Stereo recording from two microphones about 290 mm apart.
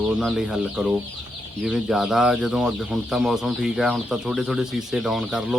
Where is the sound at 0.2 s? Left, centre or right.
Centre.